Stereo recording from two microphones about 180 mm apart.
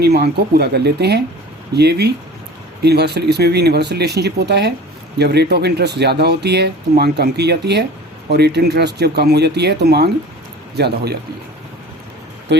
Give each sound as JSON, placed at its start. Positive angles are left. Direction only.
{"t": 0.0, "sound": "speech", "side_deg": -65}
{"t": 12.5, "sound": "speech", "side_deg": -70}